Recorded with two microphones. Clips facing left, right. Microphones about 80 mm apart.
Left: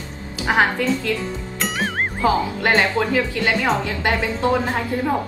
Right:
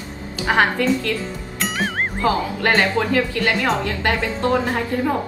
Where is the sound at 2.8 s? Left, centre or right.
Centre.